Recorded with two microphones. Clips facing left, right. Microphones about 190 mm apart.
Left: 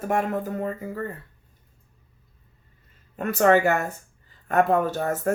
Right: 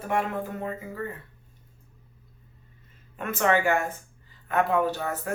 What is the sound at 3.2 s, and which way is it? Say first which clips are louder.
Speech: left 5 dB; 40° left (ahead or behind).